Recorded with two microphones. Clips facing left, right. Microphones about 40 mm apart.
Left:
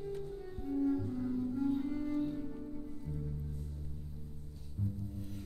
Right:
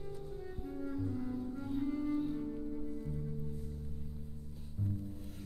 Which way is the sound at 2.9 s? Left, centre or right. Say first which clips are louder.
Right 3 dB; centre.